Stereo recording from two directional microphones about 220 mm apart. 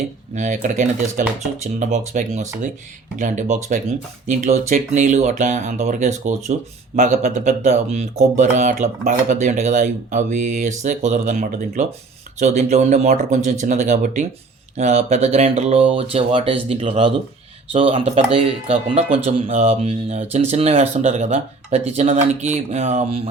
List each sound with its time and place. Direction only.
0.3 s speech: 35° right (ahead or behind)